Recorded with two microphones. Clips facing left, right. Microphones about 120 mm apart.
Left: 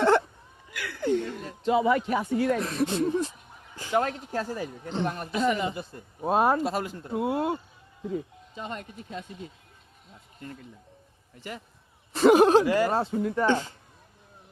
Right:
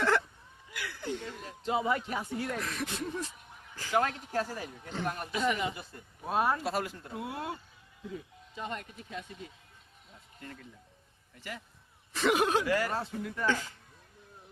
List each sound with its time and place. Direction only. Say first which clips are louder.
0.0 s a sound: left 7 dB; 25° left (ahead or behind)
0.7 s chuckle: left 10 dB; 65° left (ahead or behind)
1.6 s speech: left 7 dB; 90° left
2.6 s a man's voice: left 10 dB; 30° left (ahead or behind)
4.0 s a man's voice: left 2 dB; 35° left (ahead or behind)
8.6 s a man's voice: left 2 dB; 30° left (ahead or behind)
12.1 s speech: left 10 dB; 35° left (ahead or behind)